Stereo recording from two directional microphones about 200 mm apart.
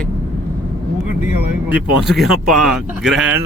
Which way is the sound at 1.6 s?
5° right (ahead or behind).